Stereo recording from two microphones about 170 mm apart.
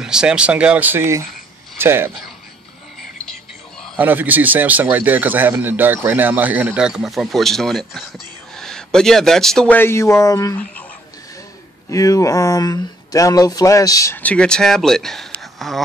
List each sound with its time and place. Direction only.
0.0 s speech: 5° right (ahead or behind)
4.0 s speech: 10° right (ahead or behind); by 10.9 s 10° left (ahead or behind)
11.9 s speech: 20° left (ahead or behind); by 15.8 s centre (ahead or behind)